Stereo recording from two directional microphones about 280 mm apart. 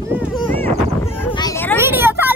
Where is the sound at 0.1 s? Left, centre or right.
Centre.